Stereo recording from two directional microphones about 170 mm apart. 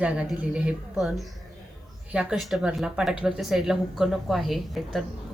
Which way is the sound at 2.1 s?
5° right (ahead or behind).